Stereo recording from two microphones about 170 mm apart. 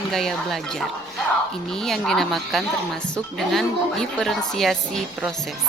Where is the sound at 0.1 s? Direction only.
Centre (ahead or behind).